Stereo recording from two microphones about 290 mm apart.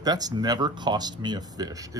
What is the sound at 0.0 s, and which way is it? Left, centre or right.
Speech, centre.